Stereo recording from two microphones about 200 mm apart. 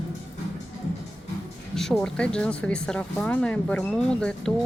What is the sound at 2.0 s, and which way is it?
Speech, 5° left (ahead or behind).